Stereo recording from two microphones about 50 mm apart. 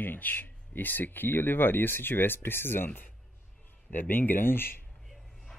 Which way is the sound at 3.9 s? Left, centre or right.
Left.